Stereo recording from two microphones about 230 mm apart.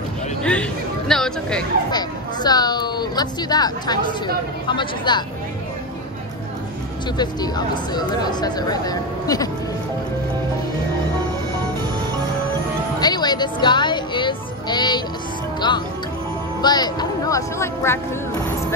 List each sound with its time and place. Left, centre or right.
0.4 s speech: centre
1.9 s speech: centre
7.2 s speech: centre
13.0 s music: centre
16.6 s speech: centre